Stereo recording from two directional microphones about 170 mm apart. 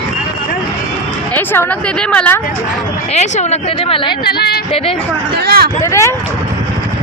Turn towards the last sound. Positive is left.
turn(degrees=15)  # may be behind; listen again after turning